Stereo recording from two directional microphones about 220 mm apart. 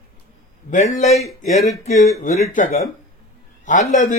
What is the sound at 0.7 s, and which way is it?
Speech, 35° left (ahead or behind).